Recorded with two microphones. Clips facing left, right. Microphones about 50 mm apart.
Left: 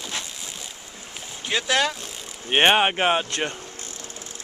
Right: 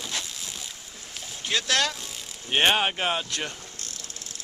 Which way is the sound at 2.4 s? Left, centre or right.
Left.